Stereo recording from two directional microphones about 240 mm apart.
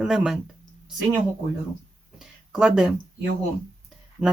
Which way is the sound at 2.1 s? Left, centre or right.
Centre.